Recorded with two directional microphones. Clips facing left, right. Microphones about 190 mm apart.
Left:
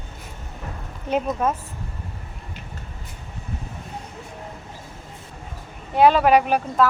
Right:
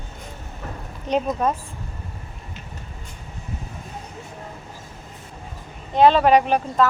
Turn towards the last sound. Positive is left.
turn(degrees=10)  # may be behind; listen again after turning